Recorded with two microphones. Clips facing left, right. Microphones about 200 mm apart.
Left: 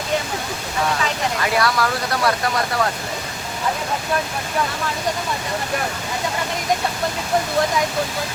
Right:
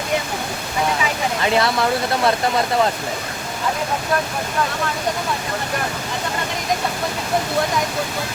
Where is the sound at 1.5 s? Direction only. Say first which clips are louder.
Right 3 dB; 25° right (ahead or behind).